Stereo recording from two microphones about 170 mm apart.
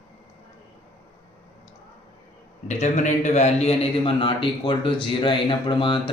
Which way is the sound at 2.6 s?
45° left (ahead or behind).